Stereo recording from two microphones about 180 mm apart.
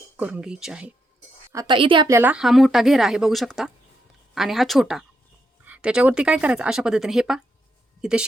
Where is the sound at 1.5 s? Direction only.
25° right (ahead or behind).